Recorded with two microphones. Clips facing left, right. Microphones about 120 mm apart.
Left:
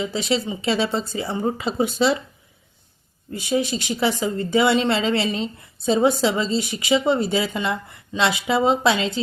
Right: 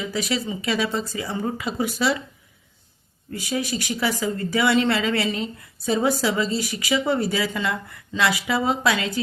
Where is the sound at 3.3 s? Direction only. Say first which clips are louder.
Left 4 dB; 25° left (ahead or behind).